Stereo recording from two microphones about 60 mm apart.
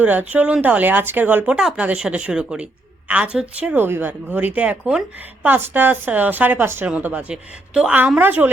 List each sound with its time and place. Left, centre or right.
0.0 s speech: right
1.5 s speech: centre
1.8 s speech: centre
3.8 s speech: right
5.5 s speech: right; by 7.9 s centre
8.2 s speech: right